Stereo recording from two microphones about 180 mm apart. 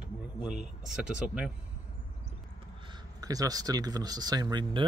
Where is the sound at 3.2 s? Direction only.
20° right (ahead or behind).